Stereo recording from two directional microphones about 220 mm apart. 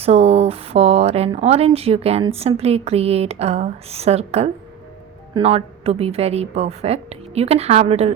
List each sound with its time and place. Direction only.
0.0 s speech: 30° right (ahead or behind)